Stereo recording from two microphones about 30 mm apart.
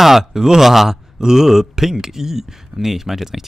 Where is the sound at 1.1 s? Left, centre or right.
Centre.